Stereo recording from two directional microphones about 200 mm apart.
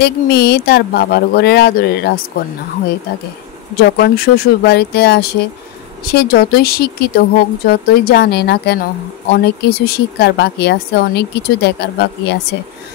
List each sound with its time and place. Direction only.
0.0 s speech: 55° left (ahead or behind)
3.7 s speech: 50° left (ahead or behind)